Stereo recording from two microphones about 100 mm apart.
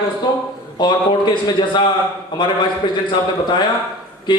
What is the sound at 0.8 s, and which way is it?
A man's voice, 45° left (ahead or behind).